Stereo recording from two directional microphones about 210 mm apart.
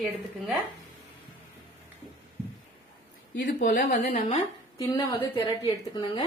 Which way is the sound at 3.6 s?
40° left (ahead or behind).